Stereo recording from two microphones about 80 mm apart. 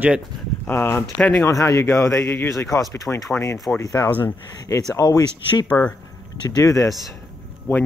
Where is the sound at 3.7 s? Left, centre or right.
Left.